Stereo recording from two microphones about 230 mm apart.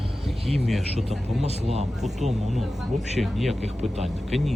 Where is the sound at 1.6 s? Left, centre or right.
Right.